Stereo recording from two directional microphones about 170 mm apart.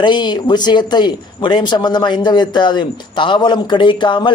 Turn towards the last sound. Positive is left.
turn(degrees=30)  # may be behind; listen again after turning